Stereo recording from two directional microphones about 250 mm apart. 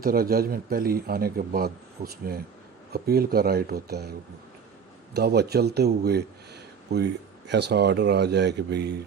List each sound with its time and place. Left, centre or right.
0.0 s speech: right
5.1 s speech: right